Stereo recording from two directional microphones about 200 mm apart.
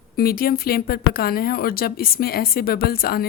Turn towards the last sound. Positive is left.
turn(degrees=50)  # may be behind; listen again after turning